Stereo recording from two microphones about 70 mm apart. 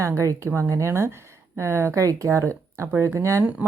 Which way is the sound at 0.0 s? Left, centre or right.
Right.